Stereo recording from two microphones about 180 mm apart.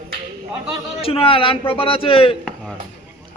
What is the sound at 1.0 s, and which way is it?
A man's voice, 30° left (ahead or behind).